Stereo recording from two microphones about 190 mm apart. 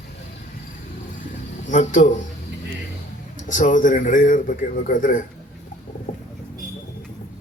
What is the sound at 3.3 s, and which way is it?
A man's voice, 40° left (ahead or behind).